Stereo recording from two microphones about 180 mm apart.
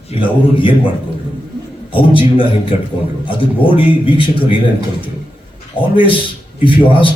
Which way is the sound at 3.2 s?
30° left (ahead or behind).